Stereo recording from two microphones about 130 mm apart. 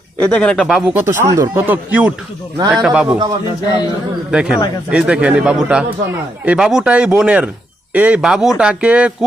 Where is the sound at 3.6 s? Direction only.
30° left (ahead or behind).